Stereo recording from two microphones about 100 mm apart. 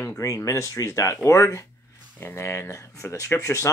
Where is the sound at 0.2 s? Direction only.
30° left (ahead or behind).